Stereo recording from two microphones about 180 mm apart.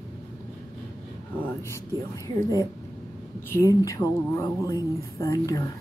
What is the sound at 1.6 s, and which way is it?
Speech, 15° left (ahead or behind).